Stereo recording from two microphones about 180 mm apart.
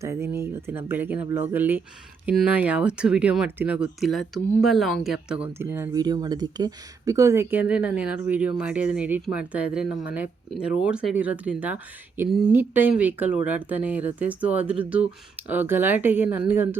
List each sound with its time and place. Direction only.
0.0 s speech: 15° right (ahead or behind)
9.9 s speech: 60° left (ahead or behind)
10.7 s speech: 5° right (ahead or behind)